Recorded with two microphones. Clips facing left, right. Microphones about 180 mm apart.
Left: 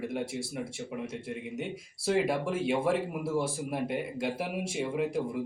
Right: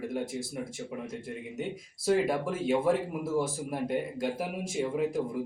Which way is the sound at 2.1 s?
5° left (ahead or behind).